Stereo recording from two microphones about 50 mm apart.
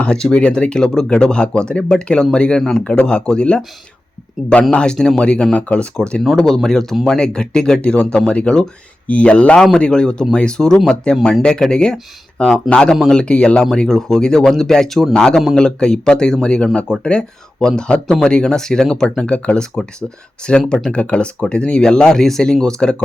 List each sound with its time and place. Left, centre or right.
0.0 s a man's voice: centre
4.4 s speech: centre
4.7 s a man's voice: centre
6.3 s a man's voice: centre
13.7 s speech: centre
15.1 s a man's voice: centre